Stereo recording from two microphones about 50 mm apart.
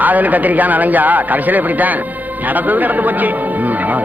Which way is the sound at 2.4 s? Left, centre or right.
Right.